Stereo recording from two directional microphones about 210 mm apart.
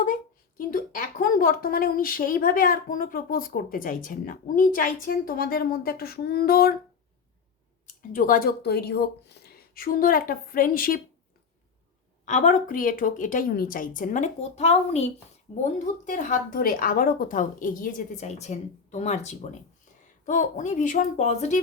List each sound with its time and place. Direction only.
0.0 s speech: 40° left (ahead or behind)
8.1 s speech: 40° left (ahead or behind)
12.2 s a woman's voice: 35° left (ahead or behind)